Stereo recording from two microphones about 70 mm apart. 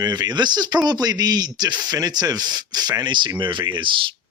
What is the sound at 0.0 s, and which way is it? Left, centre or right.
Speech, right.